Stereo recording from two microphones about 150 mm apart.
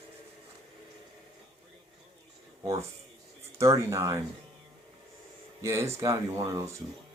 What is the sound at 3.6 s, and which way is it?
Speech, 20° right (ahead or behind).